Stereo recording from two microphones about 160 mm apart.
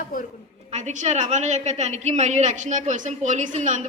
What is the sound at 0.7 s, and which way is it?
A woman's voice, 45° right (ahead or behind).